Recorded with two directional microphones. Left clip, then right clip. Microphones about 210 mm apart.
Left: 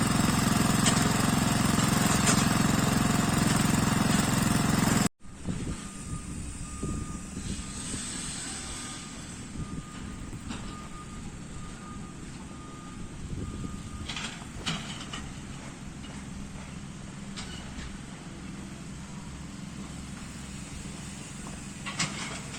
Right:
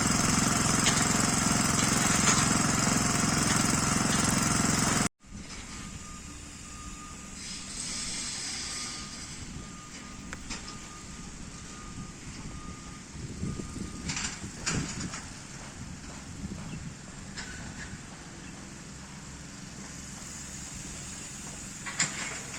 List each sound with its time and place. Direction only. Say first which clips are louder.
0.0 s lawn mower: even; 15° left (ahead or behind)
2.0 s lawn mower: right 1 dB; 55° left (ahead or behind)
2.4 s vehicle: even; 20° left (ahead or behind)
4.3 s lawn mower: even; 20° left (ahead or behind)
21.8 s a sound: right 1 dB; 40° left (ahead or behind)